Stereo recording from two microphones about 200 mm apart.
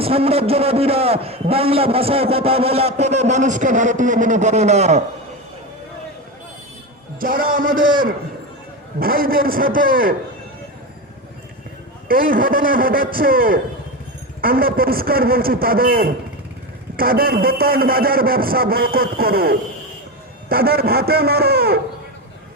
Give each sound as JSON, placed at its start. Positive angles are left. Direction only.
{"t": 0.0, "sound": "a man's voice", "side_deg": -30}
{"t": 7.2, "sound": "a man's voice", "side_deg": -45}
{"t": 12.0, "sound": "a man's voice", "side_deg": -45}